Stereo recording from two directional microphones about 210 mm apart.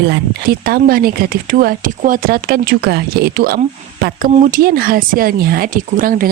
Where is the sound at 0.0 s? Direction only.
50° right (ahead or behind).